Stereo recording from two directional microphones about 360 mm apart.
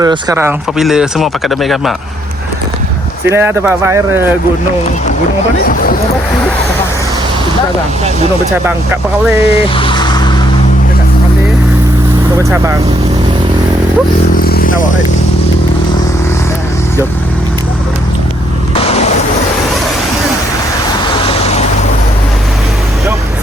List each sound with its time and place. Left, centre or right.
0.0 s speech: centre
3.2 s speech: centre
5.6 s speech: left
9.4 s vehicle: centre
12.4 s speech: centre
14.3 s a sound: left
18.7 s a sound: centre
21.1 s vehicle: centre